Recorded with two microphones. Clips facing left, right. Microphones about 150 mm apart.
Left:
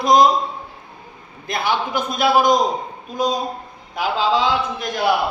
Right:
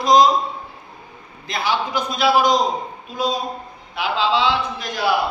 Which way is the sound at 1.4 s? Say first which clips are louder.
Left 1 dB; 55° left (ahead or behind).